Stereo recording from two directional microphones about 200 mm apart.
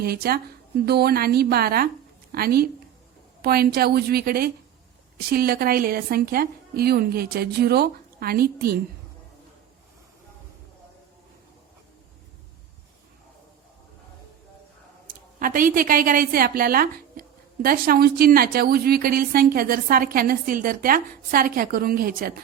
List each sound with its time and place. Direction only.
0.0 s a woman's voice: 50° right (ahead or behind)
15.0 s a woman's voice: 45° right (ahead or behind)